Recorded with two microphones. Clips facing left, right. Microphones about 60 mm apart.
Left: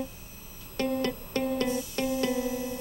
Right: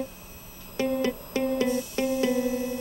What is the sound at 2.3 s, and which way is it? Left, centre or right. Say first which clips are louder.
Music: right 4 dB; right.